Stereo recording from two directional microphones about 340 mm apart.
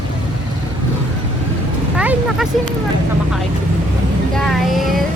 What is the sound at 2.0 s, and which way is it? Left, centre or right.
Vehicle, centre.